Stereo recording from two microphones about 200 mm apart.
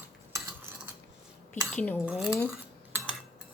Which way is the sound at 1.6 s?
10° left (ahead or behind).